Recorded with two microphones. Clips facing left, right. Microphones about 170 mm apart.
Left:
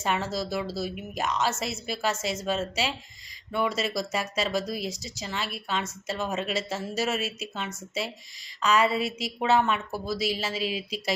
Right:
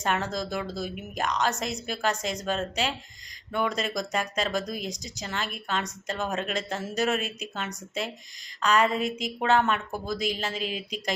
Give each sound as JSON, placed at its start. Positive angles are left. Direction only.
{"t": 0.0, "sound": "a woman's voice", "side_deg": 5}
{"t": 10.6, "sound": "speech", "side_deg": -45}